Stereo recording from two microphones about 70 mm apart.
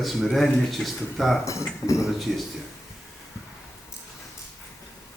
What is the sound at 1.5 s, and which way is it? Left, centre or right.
Speech, left.